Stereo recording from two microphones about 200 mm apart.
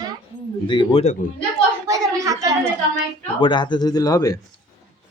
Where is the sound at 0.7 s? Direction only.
25° left (ahead or behind).